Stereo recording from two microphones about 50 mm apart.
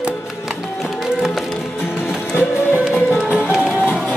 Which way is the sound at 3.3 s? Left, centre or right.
Centre.